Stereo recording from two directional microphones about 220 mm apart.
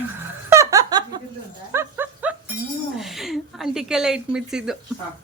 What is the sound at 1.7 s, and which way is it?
Dog, 10° right (ahead or behind).